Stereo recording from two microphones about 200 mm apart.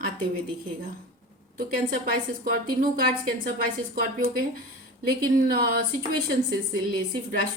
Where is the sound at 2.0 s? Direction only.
45° right (ahead or behind).